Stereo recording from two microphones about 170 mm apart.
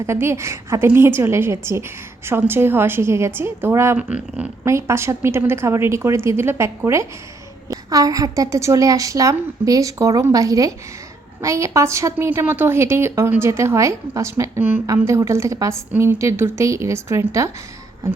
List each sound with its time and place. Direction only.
0.0 s a woman's voice: 15° right (ahead or behind)